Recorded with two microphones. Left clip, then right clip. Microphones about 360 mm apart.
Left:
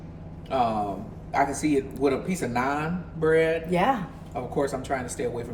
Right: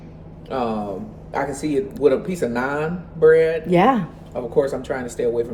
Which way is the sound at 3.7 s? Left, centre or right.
Right.